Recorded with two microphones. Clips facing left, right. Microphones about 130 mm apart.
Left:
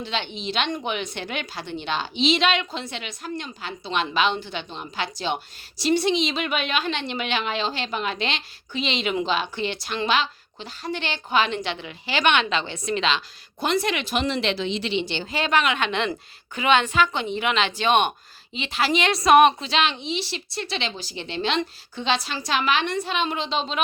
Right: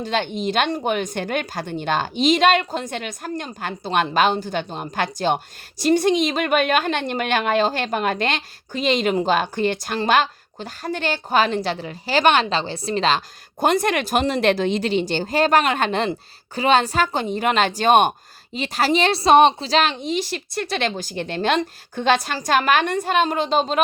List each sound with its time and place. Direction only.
0.0 s a woman's voice: 45° right (ahead or behind)